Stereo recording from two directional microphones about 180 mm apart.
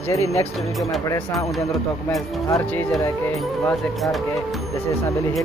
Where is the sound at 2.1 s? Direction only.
15° left (ahead or behind).